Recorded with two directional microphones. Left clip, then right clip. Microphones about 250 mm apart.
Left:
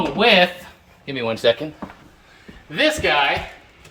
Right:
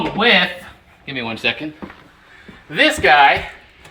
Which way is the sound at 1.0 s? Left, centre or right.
Centre.